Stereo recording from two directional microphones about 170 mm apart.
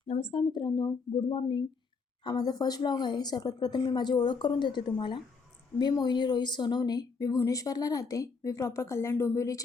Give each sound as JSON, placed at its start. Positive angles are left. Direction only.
{"t": 0.1, "sound": "speech", "side_deg": 30}